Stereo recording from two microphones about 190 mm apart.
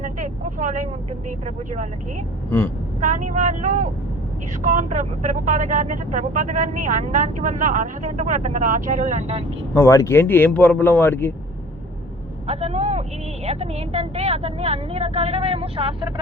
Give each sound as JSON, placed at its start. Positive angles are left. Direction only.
{"t": 0.0, "sound": "vehicle", "side_deg": -40}
{"t": 3.0, "sound": "speech", "side_deg": -40}
{"t": 9.7, "sound": "speech", "side_deg": 15}
{"t": 12.5, "sound": "speech", "side_deg": -35}